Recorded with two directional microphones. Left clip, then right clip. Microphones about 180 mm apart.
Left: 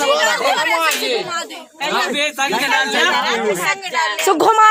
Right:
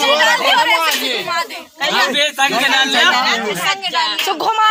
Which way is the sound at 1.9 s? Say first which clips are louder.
Right 3 dB; 20° left (ahead or behind).